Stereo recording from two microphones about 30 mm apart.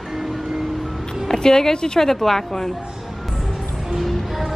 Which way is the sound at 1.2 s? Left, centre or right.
Left.